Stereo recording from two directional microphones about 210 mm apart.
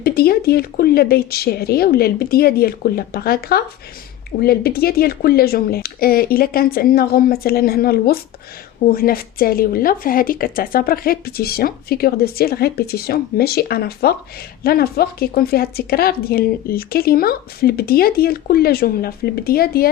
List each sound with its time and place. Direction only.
0.0 s speech: 45° left (ahead or behind)